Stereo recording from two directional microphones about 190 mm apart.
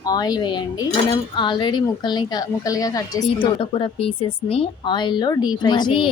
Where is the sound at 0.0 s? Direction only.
20° left (ahead or behind).